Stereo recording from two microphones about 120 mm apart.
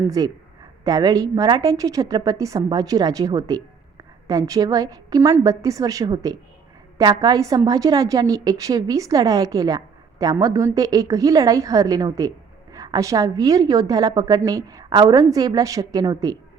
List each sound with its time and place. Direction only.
0.0 s a woman's voice: 30° right (ahead or behind)